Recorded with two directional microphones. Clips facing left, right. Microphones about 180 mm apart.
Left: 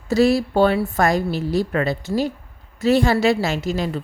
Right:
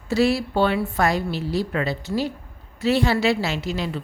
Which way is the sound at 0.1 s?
40° left (ahead or behind).